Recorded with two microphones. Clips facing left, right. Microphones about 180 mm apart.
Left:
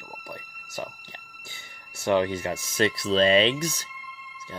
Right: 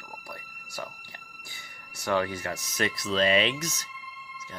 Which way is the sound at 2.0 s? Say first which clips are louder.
Left 4 dB; 25° left (ahead or behind).